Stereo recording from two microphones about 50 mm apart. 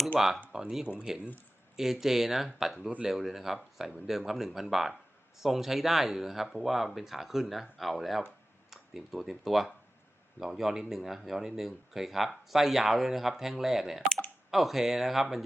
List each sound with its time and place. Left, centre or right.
0.1 s speech: centre
0.9 s speech: right
1.7 s speech: centre